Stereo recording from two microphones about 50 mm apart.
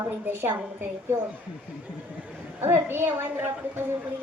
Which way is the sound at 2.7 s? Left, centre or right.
Right.